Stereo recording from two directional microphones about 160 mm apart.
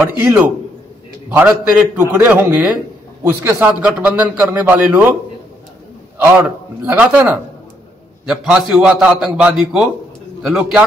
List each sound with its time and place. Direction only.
0.0 s a man's voice: 15° right (ahead or behind)
6.1 s a man's voice: 10° right (ahead or behind)